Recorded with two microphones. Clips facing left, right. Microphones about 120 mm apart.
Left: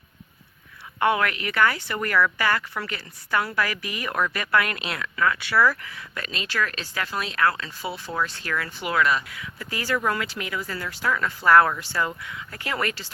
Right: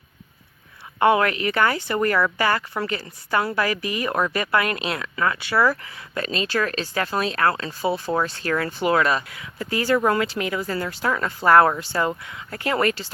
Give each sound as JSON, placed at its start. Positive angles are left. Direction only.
{"t": 0.9, "sound": "a woman's voice", "side_deg": -25}